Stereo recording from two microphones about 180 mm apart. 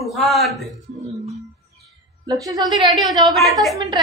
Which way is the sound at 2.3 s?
20° right (ahead or behind).